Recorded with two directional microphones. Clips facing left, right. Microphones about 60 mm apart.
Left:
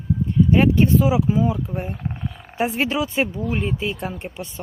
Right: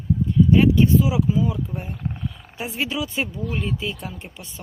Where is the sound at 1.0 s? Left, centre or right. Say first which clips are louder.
Left 2 dB; left.